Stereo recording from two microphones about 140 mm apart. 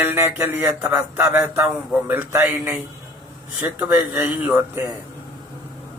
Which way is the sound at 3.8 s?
15° right (ahead or behind).